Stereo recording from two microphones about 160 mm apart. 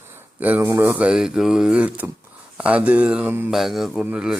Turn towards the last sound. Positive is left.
turn(degrees=-5)  # may be behind; listen again after turning